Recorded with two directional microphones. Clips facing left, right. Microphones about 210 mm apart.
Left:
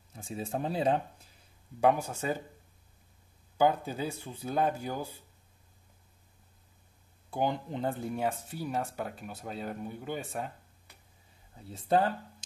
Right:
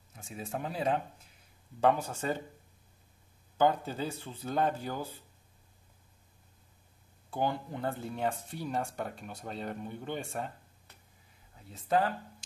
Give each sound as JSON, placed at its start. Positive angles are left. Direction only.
{"t": 0.1, "sound": "speech", "side_deg": 30}
{"t": 1.8, "sound": "speech", "side_deg": 10}
{"t": 3.5, "sound": "speech", "side_deg": 10}
{"t": 7.2, "sound": "speech", "side_deg": 15}
{"t": 11.7, "sound": "speech", "side_deg": 30}